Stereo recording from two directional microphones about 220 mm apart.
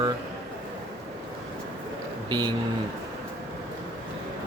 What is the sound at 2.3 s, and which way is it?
Speech, 20° right (ahead or behind).